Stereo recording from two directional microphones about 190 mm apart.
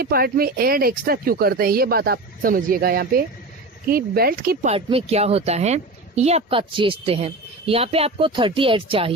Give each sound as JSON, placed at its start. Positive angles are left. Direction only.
{"t": 0.0, "sound": "speech", "side_deg": -50}
{"t": 4.7, "sound": "a woman's voice", "side_deg": -30}